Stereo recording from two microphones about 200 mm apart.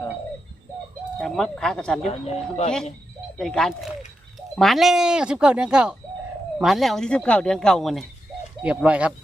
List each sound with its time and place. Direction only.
1.2 s speech: centre (ahead or behind)
2.0 s speech: 30° left (ahead or behind)
3.3 s speech: centre (ahead or behind)